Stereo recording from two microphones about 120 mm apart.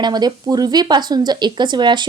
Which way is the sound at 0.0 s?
35° right (ahead or behind).